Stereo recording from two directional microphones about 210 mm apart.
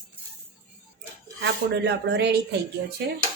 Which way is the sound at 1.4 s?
55° right (ahead or behind).